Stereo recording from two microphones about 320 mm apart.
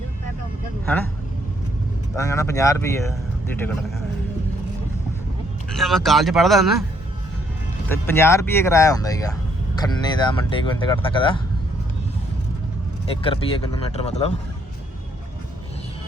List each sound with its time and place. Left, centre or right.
2.1 s a man's voice: centre
5.6 s speech: centre
7.9 s a man's voice: centre
13.2 s speech: centre